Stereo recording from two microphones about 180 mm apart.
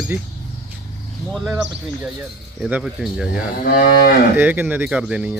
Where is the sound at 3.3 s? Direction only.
55° left (ahead or behind).